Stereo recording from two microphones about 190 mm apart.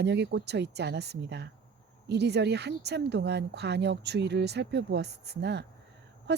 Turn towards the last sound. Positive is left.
turn(degrees=-60)  # may be behind; listen again after turning